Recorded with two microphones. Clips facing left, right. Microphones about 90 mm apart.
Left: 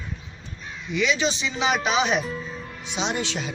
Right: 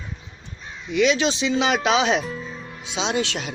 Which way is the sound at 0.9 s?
90° right.